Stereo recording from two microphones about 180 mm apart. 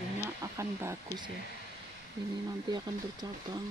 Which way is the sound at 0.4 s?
15° right (ahead or behind).